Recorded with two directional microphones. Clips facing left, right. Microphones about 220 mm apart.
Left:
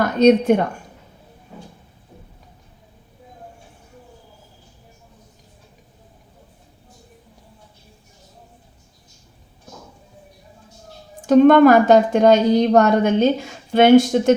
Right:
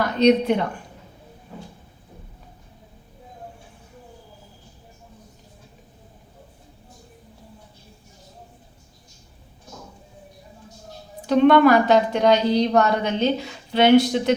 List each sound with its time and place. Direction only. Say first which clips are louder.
0.0 s a woman's voice: left 3 dB; 45° left (ahead or behind)
11.3 s a woman's voice: left 4 dB; 45° left (ahead or behind)